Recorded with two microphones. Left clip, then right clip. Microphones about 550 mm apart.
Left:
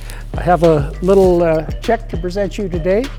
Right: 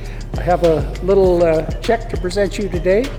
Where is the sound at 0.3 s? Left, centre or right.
Left.